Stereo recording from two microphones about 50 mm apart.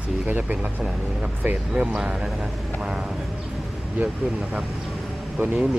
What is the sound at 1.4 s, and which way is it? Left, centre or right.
Speech, right.